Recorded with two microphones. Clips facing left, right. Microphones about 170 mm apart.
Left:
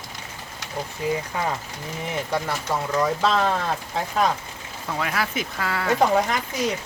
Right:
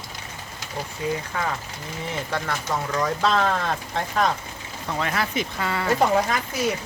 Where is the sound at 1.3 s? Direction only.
15° left (ahead or behind); by 6.3 s centre (ahead or behind).